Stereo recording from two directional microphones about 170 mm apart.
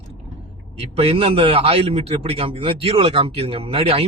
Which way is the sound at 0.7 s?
35° right (ahead or behind).